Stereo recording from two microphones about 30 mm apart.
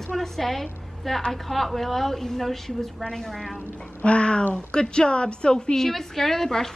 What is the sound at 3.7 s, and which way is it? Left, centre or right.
A woman's voice, left.